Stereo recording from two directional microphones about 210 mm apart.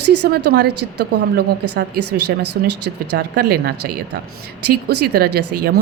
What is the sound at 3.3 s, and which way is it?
Speech, 50° right (ahead or behind).